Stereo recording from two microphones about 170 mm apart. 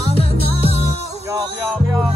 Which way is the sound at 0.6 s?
35° right (ahead or behind).